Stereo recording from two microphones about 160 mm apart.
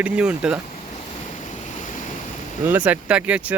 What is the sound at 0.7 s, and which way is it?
Boat, 40° left (ahead or behind).